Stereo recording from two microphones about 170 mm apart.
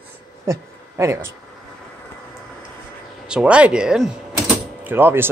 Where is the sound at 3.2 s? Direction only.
5° right (ahead or behind).